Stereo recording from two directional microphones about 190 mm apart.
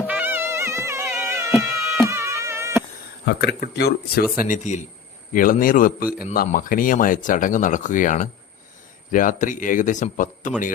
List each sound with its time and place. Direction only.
0.1 s music: 10° right (ahead or behind)
3.2 s speech: 60° left (ahead or behind)
4.4 s a man's voice: 40° left (ahead or behind)